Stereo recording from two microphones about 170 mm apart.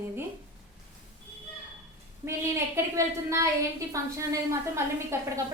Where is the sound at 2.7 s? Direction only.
15° right (ahead or behind).